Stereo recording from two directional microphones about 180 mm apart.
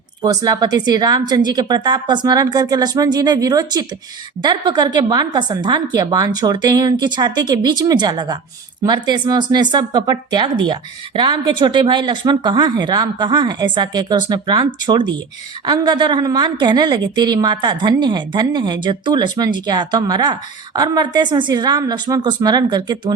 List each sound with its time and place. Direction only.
0.2 s a woman's voice: 20° right (ahead or behind)